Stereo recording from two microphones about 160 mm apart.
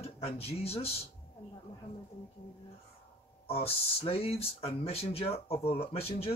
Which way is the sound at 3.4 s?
35° left (ahead or behind).